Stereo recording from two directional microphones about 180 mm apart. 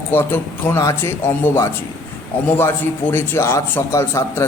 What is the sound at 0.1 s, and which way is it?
A man's voice, 10° left (ahead or behind).